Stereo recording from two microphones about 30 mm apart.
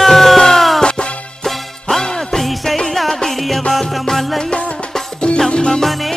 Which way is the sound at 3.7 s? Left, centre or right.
Centre.